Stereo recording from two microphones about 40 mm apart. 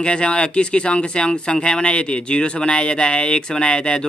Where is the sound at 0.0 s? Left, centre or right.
Left.